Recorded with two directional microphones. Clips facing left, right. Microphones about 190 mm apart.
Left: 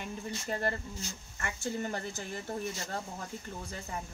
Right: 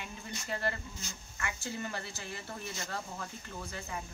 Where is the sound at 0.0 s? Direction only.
45° left (ahead or behind).